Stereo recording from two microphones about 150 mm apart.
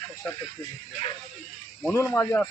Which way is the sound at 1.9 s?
15° left (ahead or behind).